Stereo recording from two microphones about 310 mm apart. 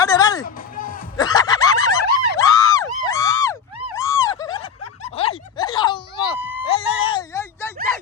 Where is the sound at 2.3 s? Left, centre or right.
Centre.